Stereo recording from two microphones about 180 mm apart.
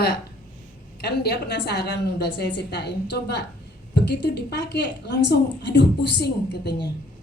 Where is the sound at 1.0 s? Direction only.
65° left (ahead or behind).